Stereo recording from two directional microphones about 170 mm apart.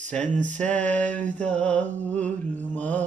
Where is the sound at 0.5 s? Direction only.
10° left (ahead or behind).